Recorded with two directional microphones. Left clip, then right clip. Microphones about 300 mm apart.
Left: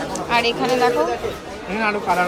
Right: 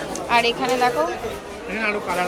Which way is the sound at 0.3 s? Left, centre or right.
Centre.